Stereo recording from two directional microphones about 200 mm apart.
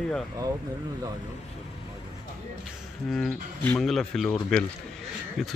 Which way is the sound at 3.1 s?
5° left (ahead or behind).